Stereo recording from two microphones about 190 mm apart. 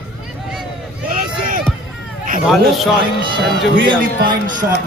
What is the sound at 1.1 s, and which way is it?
Run, 50° right (ahead or behind).